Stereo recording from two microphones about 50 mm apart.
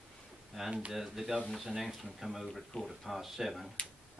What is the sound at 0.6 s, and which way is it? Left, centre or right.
Speech, centre.